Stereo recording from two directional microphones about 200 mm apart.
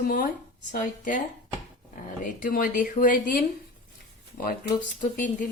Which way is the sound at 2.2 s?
45° left (ahead or behind).